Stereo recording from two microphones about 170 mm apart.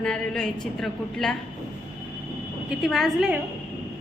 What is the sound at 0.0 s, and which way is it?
A woman's voice, 5° left (ahead or behind).